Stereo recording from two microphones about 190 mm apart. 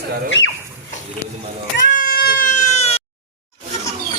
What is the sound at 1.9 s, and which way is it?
Baby cry, 50° left (ahead or behind).